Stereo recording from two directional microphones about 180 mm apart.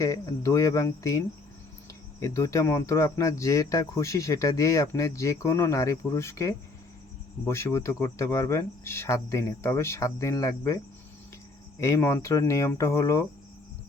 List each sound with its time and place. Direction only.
0.0 s speech: 20° left (ahead or behind)
2.2 s speech: 15° left (ahead or behind)
11.8 s speech: 15° left (ahead or behind)